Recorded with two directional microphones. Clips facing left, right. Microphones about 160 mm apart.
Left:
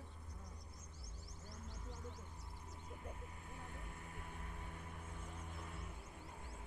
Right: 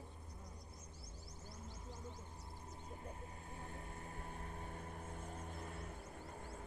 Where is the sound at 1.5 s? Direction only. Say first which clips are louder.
Even; 30° right (ahead or behind).